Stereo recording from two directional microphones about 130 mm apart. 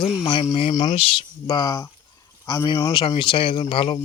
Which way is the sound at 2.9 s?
40° left (ahead or behind).